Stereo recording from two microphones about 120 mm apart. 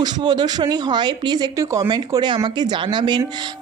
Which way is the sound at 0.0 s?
35° right (ahead or behind).